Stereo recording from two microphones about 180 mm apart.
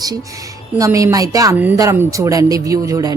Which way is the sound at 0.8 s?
15° right (ahead or behind).